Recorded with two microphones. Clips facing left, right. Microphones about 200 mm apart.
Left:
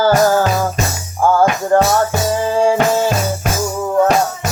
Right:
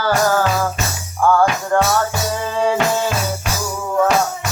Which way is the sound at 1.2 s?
30° left (ahead or behind).